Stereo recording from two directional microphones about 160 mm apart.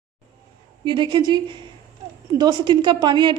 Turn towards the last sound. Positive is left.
turn(degrees=-30)  # may be behind; listen again after turning